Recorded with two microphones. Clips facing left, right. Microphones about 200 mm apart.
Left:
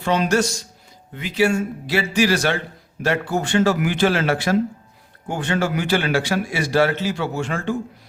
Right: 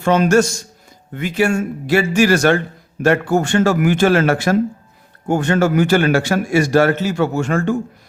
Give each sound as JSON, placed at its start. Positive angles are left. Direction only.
{"t": 0.0, "sound": "a man's voice", "side_deg": -50}